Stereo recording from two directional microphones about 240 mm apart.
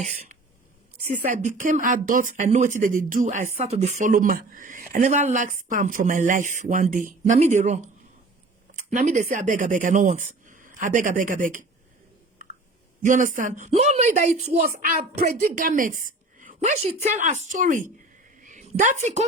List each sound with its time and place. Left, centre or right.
0.0 s speech: right
8.9 s speech: right
13.0 s speech: right
18.3 s a sound: right